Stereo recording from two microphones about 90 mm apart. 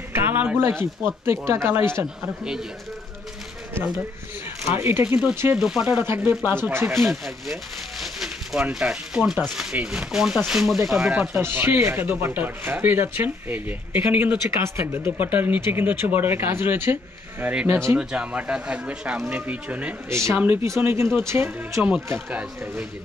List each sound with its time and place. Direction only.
0.1 s speech: 20° right (ahead or behind)
4.6 s speech: 30° right (ahead or behind)
5.0 s speech: 15° right (ahead or behind)
5.3 s speech: 25° right (ahead or behind)
5.6 s speech: 5° right (ahead or behind)
5.9 s speech: 25° right (ahead or behind)
7.1 s speech: centre (ahead or behind)
8.0 s a sound: 5° right (ahead or behind)
8.6 s speech: 10° right (ahead or behind)
11.3 s speech: 25° right (ahead or behind)
17.9 s speech: 10° right (ahead or behind)
20.1 s speech: 35° right (ahead or behind)
22.3 s speech: 15° right (ahead or behind)